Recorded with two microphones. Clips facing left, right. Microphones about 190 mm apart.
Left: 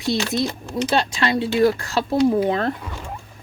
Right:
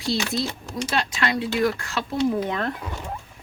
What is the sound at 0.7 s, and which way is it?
Speech, 30° left (ahead or behind).